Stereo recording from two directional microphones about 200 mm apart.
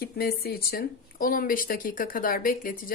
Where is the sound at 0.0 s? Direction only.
50° left (ahead or behind).